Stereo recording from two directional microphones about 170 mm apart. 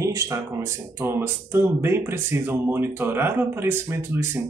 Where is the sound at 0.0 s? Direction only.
15° right (ahead or behind).